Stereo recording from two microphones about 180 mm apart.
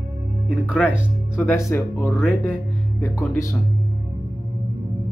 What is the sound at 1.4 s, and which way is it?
Speech, 15° left (ahead or behind).